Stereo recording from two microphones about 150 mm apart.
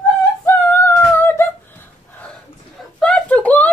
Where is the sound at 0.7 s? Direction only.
15° left (ahead or behind).